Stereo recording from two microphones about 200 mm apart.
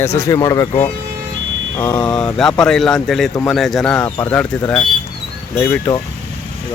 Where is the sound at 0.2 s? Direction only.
15° left (ahead or behind).